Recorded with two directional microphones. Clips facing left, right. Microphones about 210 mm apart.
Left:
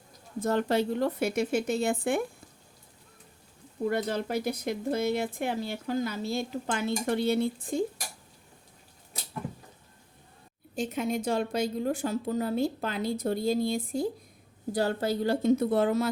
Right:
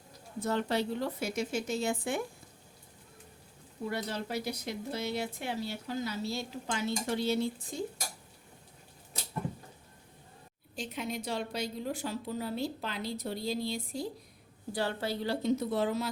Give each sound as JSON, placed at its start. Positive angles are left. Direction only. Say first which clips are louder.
{"t": 0.3, "sound": "speech", "louder": "left 5 dB", "side_deg": 45}
{"t": 3.8, "sound": "speech", "louder": "left 7 dB", "side_deg": 50}
{"t": 10.8, "sound": "speech", "louder": "left 7 dB", "side_deg": 50}